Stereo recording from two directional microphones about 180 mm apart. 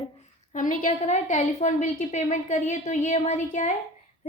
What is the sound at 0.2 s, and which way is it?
A woman's voice, 45° left (ahead or behind).